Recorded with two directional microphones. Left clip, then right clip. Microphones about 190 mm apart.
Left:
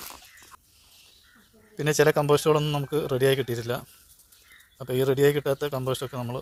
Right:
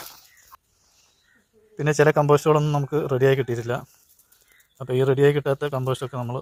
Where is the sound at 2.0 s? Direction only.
Centre (ahead or behind).